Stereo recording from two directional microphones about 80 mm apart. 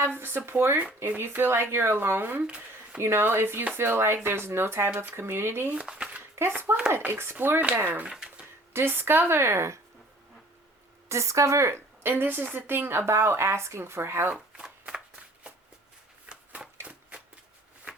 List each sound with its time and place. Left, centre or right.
0.0 s speech: right
2.4 s speech: centre
3.0 s speech: right
5.7 s speech: centre
6.9 s speech: right
8.1 s a sound: centre
8.7 s speech: right
11.1 s speech: right
12.0 s speech: right
14.3 s shuffling cards: centre
16.3 s a sound: centre